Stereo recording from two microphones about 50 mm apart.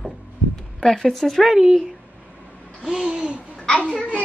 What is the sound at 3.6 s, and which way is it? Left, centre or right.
Speech, left.